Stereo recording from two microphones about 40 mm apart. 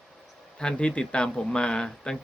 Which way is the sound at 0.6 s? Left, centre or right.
Left.